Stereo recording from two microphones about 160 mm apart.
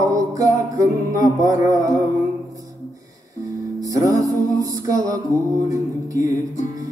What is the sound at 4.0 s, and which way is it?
Music, 20° right (ahead or behind).